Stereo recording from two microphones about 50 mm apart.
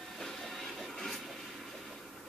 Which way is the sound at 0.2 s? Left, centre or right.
Centre.